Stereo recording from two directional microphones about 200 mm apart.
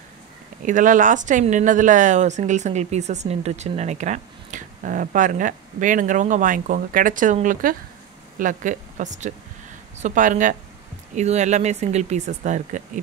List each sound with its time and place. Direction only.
0.7 s speech: 40° right (ahead or behind)